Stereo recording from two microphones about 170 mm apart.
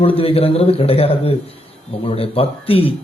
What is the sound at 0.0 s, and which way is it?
A man's voice, 35° left (ahead or behind).